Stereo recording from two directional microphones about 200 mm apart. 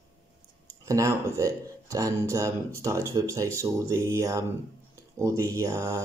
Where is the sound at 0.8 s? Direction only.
15° right (ahead or behind).